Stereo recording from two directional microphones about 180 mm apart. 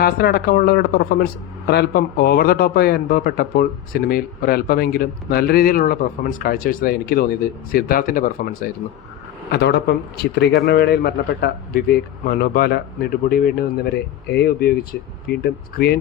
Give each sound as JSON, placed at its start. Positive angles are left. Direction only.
{"t": 0.0, "sound": "speech", "side_deg": 60}
{"t": 9.5, "sound": "speech", "side_deg": 70}